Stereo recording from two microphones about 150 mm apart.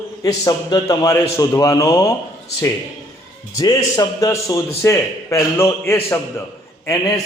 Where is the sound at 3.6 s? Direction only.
25° left (ahead or behind).